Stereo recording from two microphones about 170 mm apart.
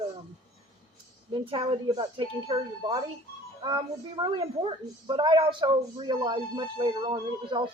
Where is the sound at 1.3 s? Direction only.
30° right (ahead or behind).